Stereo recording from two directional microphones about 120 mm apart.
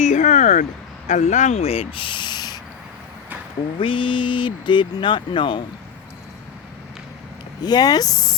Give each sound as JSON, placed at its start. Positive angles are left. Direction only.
{"t": 0.0, "sound": "a sound", "side_deg": 90}
{"t": 1.0, "sound": "speech", "side_deg": 85}
{"t": 3.8, "sound": "speech", "side_deg": 45}
{"t": 7.6, "sound": "speech", "side_deg": 35}